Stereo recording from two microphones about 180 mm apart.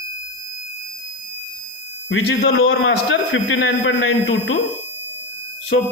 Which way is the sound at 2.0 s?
90° left.